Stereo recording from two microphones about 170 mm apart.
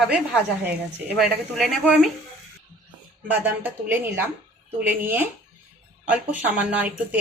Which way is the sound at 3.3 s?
10° right (ahead or behind).